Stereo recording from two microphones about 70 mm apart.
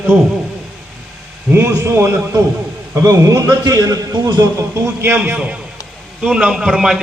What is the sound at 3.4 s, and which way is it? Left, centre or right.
A man's voice, right.